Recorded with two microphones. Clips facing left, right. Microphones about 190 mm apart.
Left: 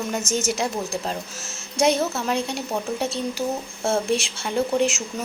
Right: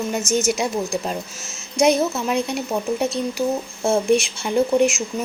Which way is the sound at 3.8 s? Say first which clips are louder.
Right 5 dB; 15° right (ahead or behind).